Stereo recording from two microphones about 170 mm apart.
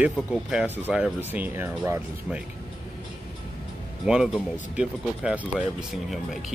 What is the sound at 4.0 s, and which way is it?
Speech, 5° right (ahead or behind).